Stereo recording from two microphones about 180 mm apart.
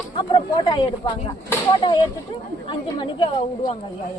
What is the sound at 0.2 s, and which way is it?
Speech, 25° left (ahead or behind).